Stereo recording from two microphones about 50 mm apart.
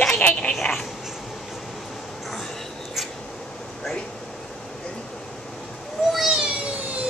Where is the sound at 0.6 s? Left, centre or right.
Centre.